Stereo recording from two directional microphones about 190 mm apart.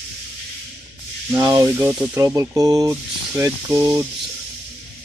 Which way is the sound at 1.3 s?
10° right (ahead or behind).